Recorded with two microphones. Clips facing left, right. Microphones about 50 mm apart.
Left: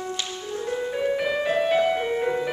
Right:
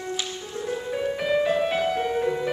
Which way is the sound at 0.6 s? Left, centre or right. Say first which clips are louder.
Left 2 dB; centre.